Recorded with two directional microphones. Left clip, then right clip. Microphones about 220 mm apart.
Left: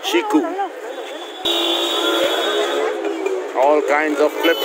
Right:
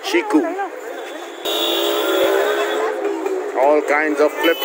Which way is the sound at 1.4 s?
40° right (ahead or behind).